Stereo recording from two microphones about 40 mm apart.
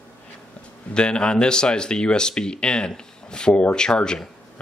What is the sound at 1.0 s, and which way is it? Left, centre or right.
Speech, left.